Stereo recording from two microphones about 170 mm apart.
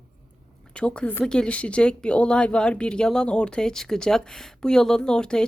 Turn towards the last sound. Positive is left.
turn(degrees=5)  # may be behind; listen again after turning